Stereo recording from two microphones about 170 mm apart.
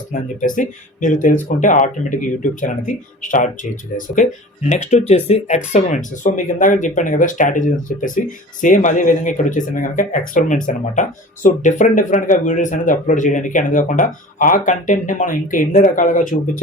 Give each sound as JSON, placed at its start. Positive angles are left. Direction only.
{"t": 0.1, "sound": "speech", "side_deg": 50}